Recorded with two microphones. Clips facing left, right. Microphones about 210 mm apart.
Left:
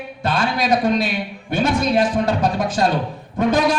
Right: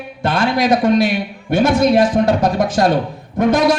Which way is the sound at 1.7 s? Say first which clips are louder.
Right 6 dB; 90° right.